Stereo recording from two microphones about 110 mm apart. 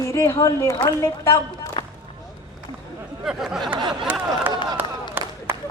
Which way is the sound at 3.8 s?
45° right (ahead or behind).